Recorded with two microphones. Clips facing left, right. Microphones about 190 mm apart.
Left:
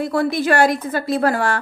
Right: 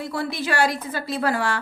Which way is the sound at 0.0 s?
50° left (ahead or behind).